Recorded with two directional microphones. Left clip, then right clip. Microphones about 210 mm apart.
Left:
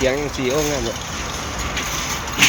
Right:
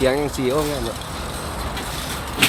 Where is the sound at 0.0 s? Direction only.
15° right (ahead or behind).